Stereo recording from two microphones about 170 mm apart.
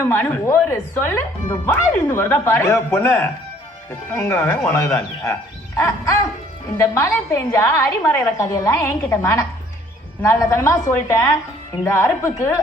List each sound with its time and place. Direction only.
0.1 s speech: 15° left (ahead or behind)
6.7 s speech: 15° left (ahead or behind)